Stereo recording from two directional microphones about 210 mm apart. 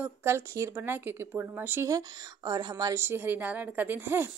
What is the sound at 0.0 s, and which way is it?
Speech, 10° right (ahead or behind).